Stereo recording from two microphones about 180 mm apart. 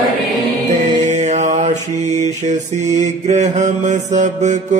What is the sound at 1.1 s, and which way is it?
Mantra, 40° right (ahead or behind).